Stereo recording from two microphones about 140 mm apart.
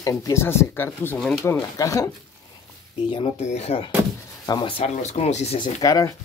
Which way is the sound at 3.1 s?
50° left (ahead or behind).